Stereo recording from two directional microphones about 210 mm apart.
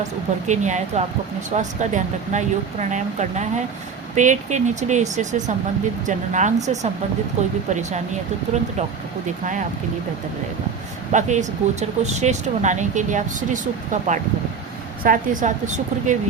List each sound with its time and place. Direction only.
0.4 s speech: 35° right (ahead or behind)
9.2 s speech: 35° right (ahead or behind)
11.1 s speech: 35° right (ahead or behind)